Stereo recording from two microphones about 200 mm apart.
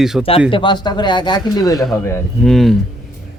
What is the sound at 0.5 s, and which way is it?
Speech, 25° left (ahead or behind).